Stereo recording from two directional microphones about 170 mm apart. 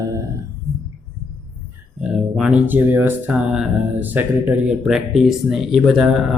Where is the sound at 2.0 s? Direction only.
5° right (ahead or behind).